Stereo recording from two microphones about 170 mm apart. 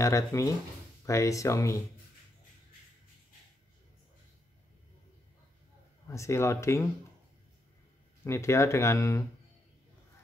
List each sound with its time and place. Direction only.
0.0 s speech: 20° left (ahead or behind)
6.0 s speech: 15° left (ahead or behind)
8.2 s speech: 15° left (ahead or behind)